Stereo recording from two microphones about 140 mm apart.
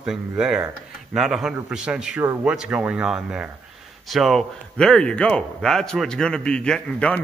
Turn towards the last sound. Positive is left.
turn(degrees=5)  # may be behind; listen again after turning